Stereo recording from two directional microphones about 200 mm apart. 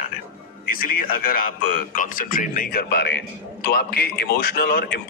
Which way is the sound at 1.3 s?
45° left (ahead or behind).